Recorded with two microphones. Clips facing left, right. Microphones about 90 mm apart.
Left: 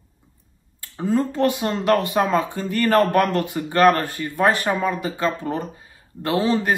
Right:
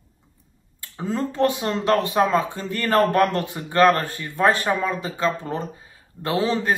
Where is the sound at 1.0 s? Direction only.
15° left (ahead or behind).